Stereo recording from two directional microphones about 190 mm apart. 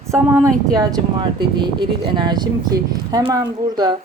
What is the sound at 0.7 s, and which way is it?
A woman's voice, 20° right (ahead or behind).